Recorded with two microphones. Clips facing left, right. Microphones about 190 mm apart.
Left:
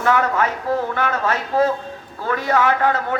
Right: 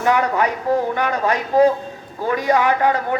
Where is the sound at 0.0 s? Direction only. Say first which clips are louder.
Right 1 dB; 15° right (ahead or behind).